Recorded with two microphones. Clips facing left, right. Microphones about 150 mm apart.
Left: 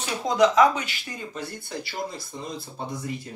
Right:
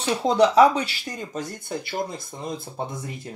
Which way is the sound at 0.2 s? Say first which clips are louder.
Right 2 dB; 30° right (ahead or behind).